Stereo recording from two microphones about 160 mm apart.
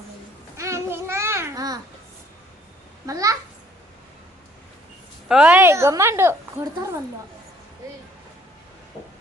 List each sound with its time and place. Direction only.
0.5 s babbling: 15° right (ahead or behind)
3.1 s babbling: 20° right (ahead or behind)
5.3 s a woman's voice: 5° right (ahead or behind)